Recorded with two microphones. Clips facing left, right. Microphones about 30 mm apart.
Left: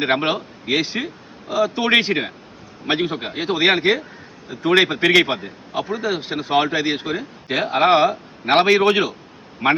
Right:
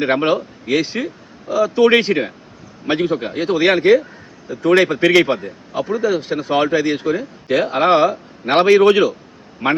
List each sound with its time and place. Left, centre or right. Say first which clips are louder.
0.0 s a man's voice: right 3 dB; centre
4.4 s a man's voice: right 3 dB; left